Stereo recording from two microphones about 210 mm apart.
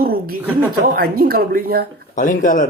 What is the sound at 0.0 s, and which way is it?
Chuckle, 45° right (ahead or behind).